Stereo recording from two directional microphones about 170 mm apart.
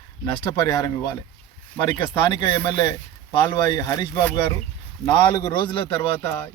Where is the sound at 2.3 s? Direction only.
25° left (ahead or behind).